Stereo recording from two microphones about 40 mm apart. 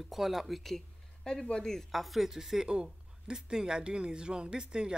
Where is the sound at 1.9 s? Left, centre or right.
Centre.